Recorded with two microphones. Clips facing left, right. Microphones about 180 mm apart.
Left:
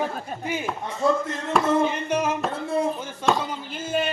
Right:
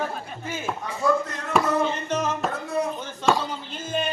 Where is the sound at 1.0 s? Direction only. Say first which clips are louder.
Left 1 dB; 25° left (ahead or behind).